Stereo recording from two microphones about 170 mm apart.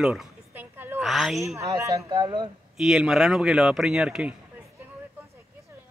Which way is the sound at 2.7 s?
Centre (ahead or behind).